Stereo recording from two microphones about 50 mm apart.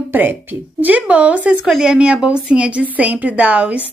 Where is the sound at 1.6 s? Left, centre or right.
Centre.